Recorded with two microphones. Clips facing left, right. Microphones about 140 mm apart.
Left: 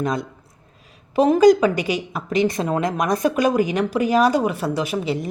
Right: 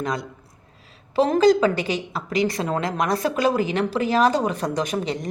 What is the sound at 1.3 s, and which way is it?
A woman's voice, 15° left (ahead or behind).